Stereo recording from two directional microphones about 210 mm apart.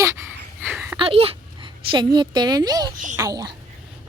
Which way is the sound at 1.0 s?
25° right (ahead or behind).